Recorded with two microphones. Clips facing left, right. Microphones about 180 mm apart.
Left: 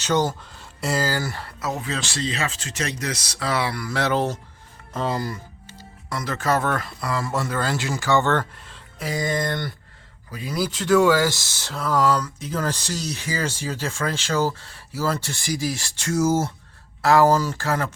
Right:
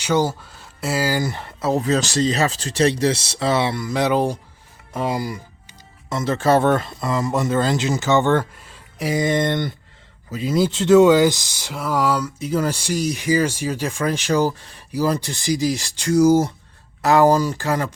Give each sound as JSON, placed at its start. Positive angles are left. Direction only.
{"t": 0.0, "sound": "speech", "side_deg": -10}
{"t": 1.7, "sound": "speech", "side_deg": -40}
{"t": 6.1, "sound": "speech", "side_deg": -25}